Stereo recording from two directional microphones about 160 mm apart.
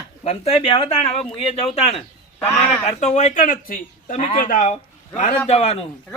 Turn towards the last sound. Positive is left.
turn(degrees=40)  # may be behind; listen again after turning